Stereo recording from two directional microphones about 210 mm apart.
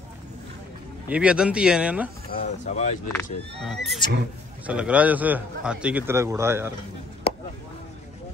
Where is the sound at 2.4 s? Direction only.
35° left (ahead or behind).